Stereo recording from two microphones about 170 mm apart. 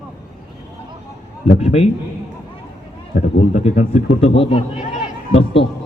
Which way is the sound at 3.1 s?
45° left (ahead or behind).